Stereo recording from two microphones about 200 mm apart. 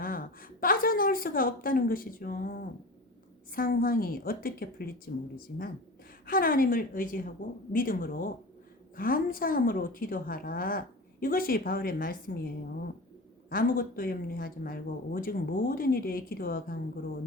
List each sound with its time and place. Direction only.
0.0 s a woman's voice: 45° left (ahead or behind)
6.2 s a woman's voice: 45° left (ahead or behind)
13.5 s a woman's voice: 45° left (ahead or behind)